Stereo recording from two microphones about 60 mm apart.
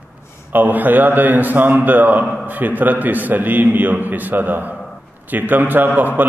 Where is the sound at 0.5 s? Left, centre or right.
Right.